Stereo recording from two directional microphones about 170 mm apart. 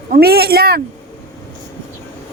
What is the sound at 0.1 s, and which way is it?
Speech, 65° right (ahead or behind).